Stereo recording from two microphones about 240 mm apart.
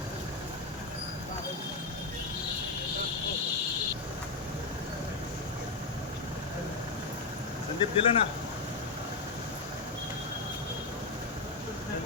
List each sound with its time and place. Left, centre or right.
7.8 s speech: left